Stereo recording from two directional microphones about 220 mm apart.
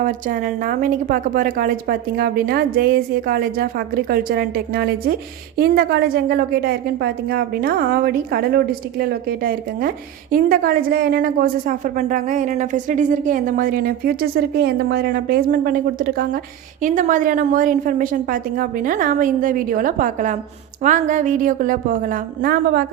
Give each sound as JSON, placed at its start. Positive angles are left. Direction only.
{"t": 0.0, "sound": "a woman's voice", "side_deg": -40}